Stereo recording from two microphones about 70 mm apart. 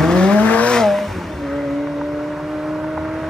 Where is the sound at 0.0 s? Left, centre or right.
Centre.